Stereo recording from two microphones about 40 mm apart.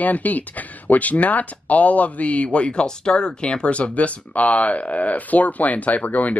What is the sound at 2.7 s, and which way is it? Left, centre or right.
Speech, left.